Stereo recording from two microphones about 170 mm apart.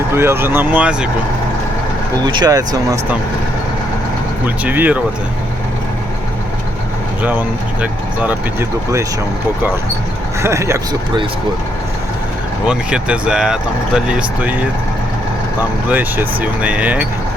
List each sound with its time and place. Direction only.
0.1 s speech: 15° right (ahead or behind)
2.2 s speech: 25° right (ahead or behind)
4.4 s speech: 10° right (ahead or behind)
7.2 s speech: 10° right (ahead or behind)
10.4 s speech: 15° right (ahead or behind)
12.6 s speech: 5° right (ahead or behind)
15.9 s speech: 10° right (ahead or behind)